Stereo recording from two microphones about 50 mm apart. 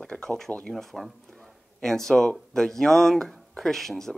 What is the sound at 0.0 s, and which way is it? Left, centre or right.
Speech, centre.